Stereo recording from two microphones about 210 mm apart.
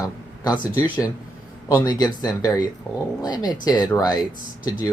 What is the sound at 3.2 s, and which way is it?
Speech, 20° left (ahead or behind).